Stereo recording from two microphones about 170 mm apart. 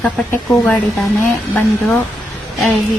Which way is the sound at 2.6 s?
Centre (ahead or behind).